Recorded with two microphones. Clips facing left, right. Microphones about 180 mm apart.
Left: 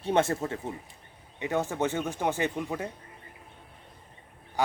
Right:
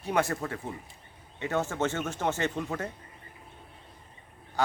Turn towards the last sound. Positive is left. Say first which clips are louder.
# even
turn(degrees=15)  # may be behind; listen again after turning